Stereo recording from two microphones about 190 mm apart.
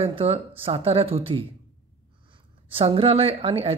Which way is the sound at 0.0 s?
30° right (ahead or behind).